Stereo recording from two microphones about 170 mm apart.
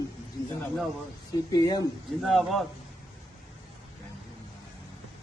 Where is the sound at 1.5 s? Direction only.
25° left (ahead or behind).